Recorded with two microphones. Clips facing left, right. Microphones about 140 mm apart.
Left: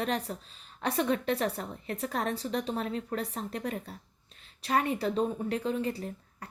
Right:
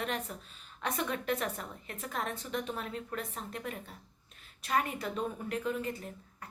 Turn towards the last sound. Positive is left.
turn(degrees=35)  # may be behind; listen again after turning